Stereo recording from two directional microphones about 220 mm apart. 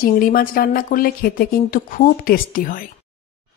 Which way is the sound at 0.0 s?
40° left (ahead or behind).